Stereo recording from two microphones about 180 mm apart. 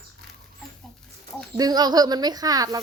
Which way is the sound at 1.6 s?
20° right (ahead or behind).